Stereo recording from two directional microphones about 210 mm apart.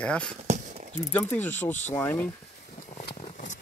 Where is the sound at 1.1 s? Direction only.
10° left (ahead or behind).